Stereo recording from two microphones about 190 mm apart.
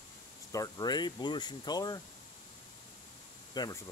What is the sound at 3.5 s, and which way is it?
Speech, 20° left (ahead or behind).